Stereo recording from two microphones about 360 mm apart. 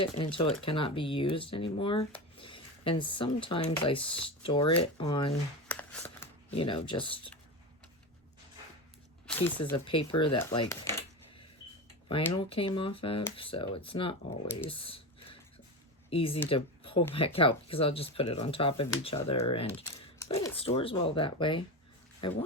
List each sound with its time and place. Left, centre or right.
0.0 s speech: centre
9.4 s speech: centre
12.0 s speech: centre